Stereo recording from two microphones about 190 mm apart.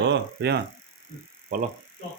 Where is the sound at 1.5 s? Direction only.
45° right (ahead or behind).